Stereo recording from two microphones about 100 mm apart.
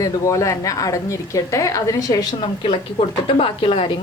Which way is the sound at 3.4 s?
60° left (ahead or behind).